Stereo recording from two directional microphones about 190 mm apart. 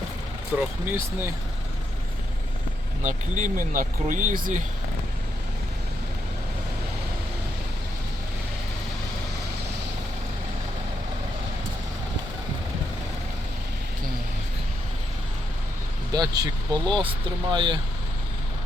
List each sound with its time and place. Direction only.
0.5 s speech: 10° right (ahead or behind)
3.0 s speech: 40° right (ahead or behind)
16.1 s speech: 20° right (ahead or behind)